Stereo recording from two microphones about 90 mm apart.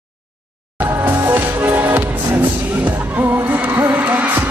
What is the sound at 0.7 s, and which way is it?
Music, 25° right (ahead or behind).